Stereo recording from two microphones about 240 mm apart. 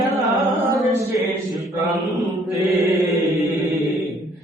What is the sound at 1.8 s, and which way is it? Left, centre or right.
Mantra, centre.